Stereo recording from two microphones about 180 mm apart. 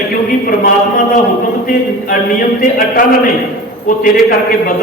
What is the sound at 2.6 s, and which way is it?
Speech, 50° left (ahead or behind).